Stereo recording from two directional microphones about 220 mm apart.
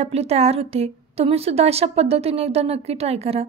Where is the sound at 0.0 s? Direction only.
30° right (ahead or behind).